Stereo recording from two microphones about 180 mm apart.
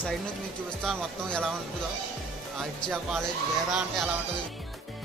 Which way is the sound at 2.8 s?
Centre (ahead or behind).